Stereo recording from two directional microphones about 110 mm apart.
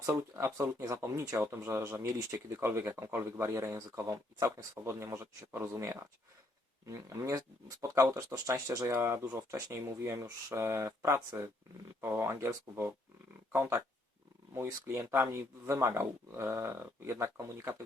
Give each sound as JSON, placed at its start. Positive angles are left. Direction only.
{"t": 0.0, "sound": "speech", "side_deg": -25}